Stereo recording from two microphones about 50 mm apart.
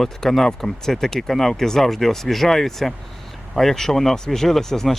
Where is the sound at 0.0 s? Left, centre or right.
Centre.